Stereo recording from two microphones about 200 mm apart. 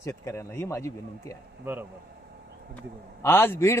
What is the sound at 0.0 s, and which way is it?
Speech, 15° left (ahead or behind).